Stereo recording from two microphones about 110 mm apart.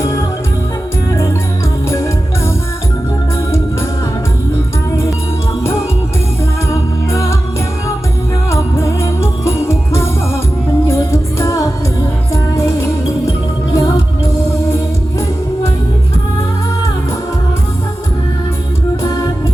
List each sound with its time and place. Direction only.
0.0 s music: 25° left (ahead or behind)
6.7 s music: 25° left (ahead or behind)
8.4 s music: 25° left (ahead or behind)
13.7 s music: 30° left (ahead or behind)